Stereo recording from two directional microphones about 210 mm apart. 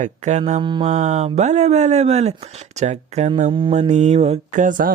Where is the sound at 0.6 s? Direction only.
20° right (ahead or behind).